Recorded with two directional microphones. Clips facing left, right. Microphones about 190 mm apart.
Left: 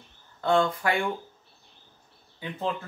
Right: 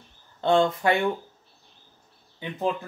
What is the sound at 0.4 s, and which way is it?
Speech, 20° right (ahead or behind).